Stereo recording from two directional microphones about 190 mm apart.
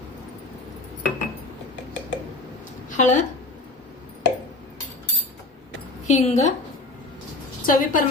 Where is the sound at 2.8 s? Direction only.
40° left (ahead or behind).